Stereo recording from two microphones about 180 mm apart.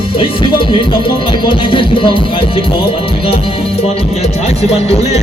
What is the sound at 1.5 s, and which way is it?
Music, 30° left (ahead or behind).